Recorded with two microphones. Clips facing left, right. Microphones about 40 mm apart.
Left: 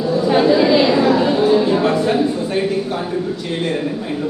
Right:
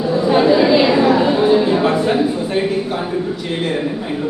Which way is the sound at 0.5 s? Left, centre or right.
Centre.